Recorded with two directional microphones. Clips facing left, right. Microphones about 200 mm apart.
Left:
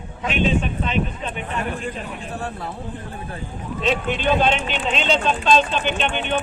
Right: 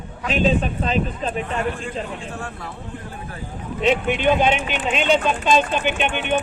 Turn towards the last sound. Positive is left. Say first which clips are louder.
# right 1 dB
turn(degrees=-10)  # may be behind; listen again after turning